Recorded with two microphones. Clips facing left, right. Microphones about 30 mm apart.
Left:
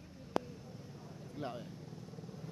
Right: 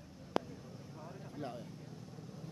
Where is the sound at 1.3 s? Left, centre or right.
Centre.